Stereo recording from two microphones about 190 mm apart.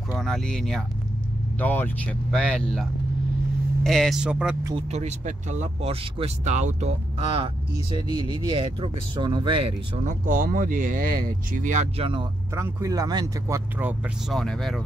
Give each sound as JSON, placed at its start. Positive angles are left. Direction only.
{"t": 0.2, "sound": "speech", "side_deg": 5}
{"t": 4.9, "sound": "speech", "side_deg": -40}
{"t": 10.0, "sound": "speech", "side_deg": -45}
{"t": 12.5, "sound": "speech", "side_deg": -15}
{"t": 13.7, "sound": "speech", "side_deg": -10}